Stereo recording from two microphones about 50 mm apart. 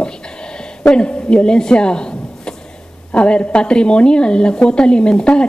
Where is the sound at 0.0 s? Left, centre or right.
Centre.